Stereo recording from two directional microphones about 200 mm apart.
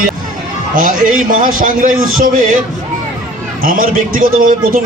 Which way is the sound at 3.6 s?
45° right (ahead or behind).